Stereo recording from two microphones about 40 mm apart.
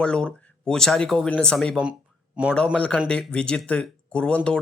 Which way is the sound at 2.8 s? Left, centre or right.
Left.